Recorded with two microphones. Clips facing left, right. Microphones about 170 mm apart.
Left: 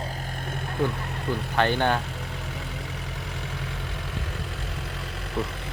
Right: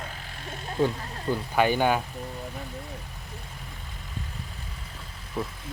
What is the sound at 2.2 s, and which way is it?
Vehicle, 80° left.